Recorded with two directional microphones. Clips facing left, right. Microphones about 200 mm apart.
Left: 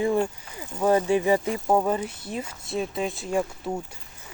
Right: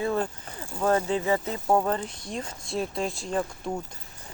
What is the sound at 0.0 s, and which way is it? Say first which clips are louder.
Speech: left 4 dB; 15° left (ahead or behind).